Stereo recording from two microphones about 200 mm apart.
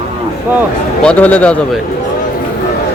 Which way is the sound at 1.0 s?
5° left (ahead or behind).